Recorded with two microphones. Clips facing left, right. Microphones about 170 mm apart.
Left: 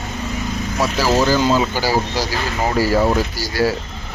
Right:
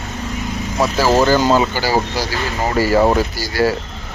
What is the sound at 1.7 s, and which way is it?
Speech, 10° left (ahead or behind).